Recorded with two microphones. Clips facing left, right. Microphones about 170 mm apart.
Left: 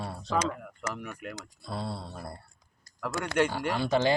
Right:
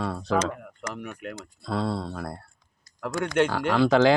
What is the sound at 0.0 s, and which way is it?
Speech, 75° right (ahead or behind).